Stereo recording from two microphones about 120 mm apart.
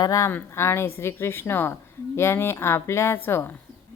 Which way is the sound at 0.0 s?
30° left (ahead or behind).